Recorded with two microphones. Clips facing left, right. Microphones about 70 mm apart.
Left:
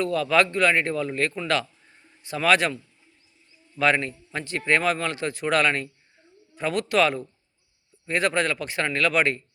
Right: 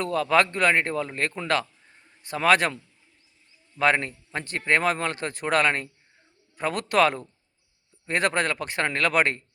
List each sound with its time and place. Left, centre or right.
0.0 s speech: right
3.8 s speech: right